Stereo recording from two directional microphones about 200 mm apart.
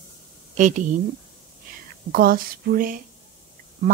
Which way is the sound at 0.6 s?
40° right (ahead or behind).